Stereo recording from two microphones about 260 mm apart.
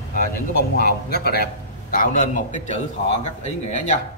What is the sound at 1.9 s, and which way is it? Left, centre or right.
Speech, left.